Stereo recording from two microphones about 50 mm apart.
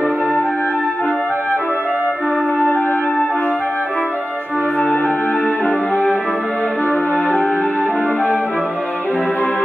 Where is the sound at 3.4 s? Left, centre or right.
Left.